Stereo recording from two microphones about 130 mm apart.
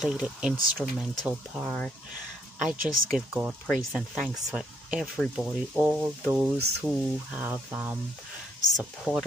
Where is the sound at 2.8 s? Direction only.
10° right (ahead or behind).